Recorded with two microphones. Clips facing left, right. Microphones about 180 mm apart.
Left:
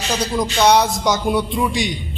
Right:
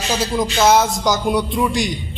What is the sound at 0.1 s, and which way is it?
A man's voice, 5° right (ahead or behind).